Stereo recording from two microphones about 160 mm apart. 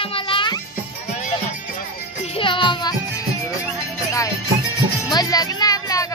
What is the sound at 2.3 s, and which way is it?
Music, 30° left (ahead or behind).